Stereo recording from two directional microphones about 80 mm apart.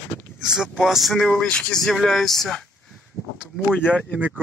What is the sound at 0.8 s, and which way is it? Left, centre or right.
Speech, centre.